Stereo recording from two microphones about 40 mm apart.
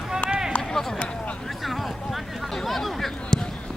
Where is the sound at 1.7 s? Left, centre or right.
Centre.